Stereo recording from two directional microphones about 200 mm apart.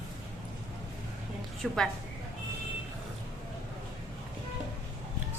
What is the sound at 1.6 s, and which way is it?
Speech, centre (ahead or behind).